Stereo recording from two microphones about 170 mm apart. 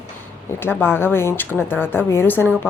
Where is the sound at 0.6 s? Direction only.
15° left (ahead or behind).